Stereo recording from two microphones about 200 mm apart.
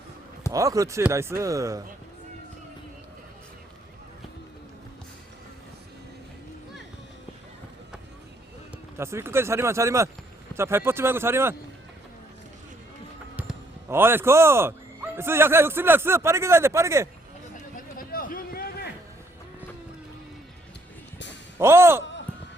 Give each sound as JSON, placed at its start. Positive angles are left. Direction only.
{"t": 0.5, "sound": "a man's voice", "side_deg": -15}
{"t": 9.0, "sound": "a man's voice", "side_deg": -15}
{"t": 13.8, "sound": "a man's voice", "side_deg": -10}
{"t": 17.7, "sound": "a sound", "side_deg": 45}
{"t": 21.6, "sound": "a man's voice", "side_deg": -15}